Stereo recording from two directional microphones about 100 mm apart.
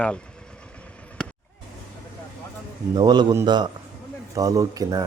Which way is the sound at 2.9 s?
45° right (ahead or behind).